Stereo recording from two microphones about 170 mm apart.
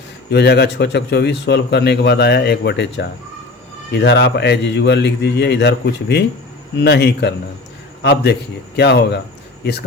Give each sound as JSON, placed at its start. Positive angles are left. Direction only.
{"t": 0.3, "sound": "a man's voice", "side_deg": 80}